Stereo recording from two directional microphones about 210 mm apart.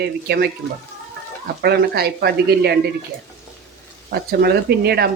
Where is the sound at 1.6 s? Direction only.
50° right (ahead or behind).